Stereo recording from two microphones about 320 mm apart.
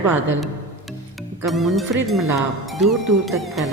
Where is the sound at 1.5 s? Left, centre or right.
Centre.